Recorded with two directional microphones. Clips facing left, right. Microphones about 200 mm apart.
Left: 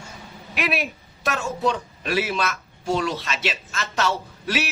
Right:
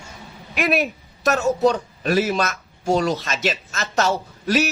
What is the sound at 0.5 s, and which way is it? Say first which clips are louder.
A man's voice: right 5 dB; 45° right (ahead or behind).